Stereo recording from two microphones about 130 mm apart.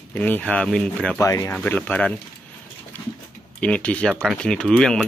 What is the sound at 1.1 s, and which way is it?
Speech, 25° left (ahead or behind).